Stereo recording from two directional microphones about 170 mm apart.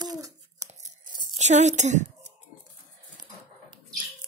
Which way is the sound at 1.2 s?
45° right (ahead or behind).